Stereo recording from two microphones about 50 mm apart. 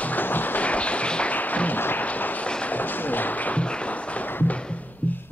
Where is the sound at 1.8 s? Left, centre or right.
Left.